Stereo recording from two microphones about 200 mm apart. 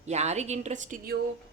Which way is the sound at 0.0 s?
35° right (ahead or behind).